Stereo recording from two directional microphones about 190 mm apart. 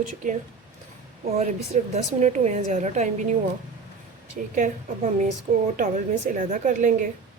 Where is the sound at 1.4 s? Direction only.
35° right (ahead or behind).